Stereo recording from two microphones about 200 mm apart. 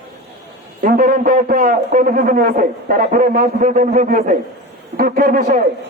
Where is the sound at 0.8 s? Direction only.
45° right (ahead or behind).